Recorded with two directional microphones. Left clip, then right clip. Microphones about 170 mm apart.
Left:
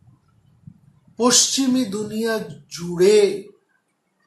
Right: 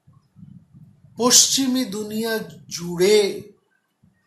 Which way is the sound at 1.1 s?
35° right (ahead or behind).